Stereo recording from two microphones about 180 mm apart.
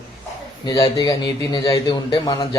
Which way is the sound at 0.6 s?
20° left (ahead or behind).